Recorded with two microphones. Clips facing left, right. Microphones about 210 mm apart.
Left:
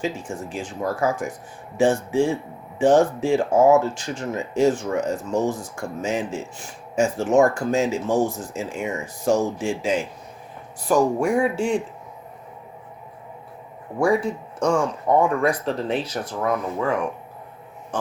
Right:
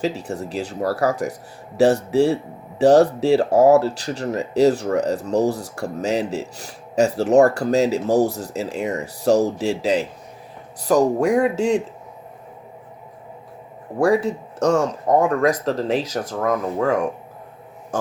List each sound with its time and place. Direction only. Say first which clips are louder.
0.0 s speech: right 3 dB; 35° right (ahead or behind)
14.0 s speech: right 3 dB; 35° right (ahead or behind)